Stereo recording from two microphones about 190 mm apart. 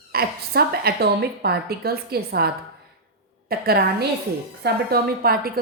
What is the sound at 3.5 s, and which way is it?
A woman's voice, 55° right (ahead or behind).